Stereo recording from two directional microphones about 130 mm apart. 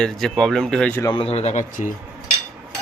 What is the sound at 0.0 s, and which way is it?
Speech, 5° left (ahead or behind).